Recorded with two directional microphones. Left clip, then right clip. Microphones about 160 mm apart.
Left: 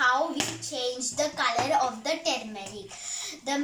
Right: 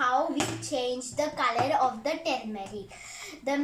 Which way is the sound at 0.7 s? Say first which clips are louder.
Right 1 dB; 10° right (ahead or behind).